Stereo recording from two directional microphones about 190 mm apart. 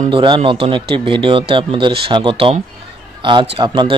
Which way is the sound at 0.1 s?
30° right (ahead or behind).